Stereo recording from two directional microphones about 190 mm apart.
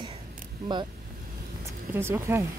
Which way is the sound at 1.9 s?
15° right (ahead or behind).